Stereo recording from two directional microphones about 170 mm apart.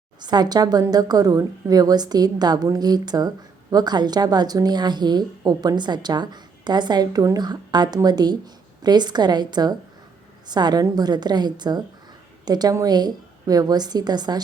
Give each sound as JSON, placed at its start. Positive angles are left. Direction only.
{"t": 0.2, "sound": "a woman's voice", "side_deg": -25}